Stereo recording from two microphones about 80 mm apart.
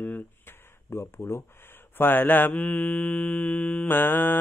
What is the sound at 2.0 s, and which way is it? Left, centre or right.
Mantra, left.